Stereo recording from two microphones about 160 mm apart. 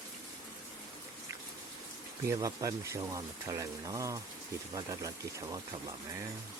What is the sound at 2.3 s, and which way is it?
Speech, 20° right (ahead or behind).